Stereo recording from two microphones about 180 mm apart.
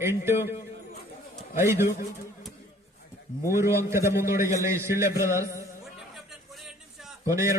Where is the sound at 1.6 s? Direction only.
15° right (ahead or behind).